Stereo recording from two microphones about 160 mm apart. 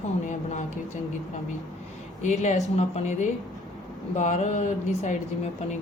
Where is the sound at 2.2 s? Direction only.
50° left (ahead or behind).